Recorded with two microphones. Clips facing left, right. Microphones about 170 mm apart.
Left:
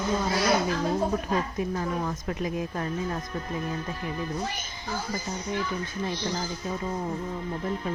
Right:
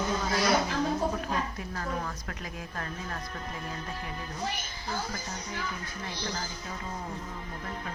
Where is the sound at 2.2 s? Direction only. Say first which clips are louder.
Left 10 dB; 20° left (ahead or behind).